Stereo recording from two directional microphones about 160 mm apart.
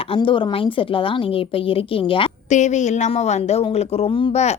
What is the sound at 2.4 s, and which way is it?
Speech, 50° left (ahead or behind).